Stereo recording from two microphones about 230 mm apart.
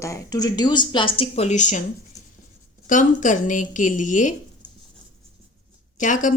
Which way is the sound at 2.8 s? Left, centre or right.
Left.